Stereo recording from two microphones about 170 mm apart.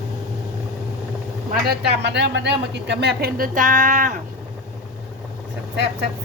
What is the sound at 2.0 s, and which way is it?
A woman's voice, 90° right.